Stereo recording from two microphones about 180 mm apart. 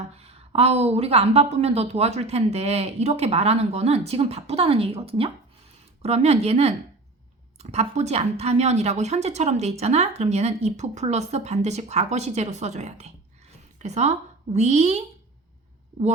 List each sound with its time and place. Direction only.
0.1 s a woman's voice: 35° right (ahead or behind)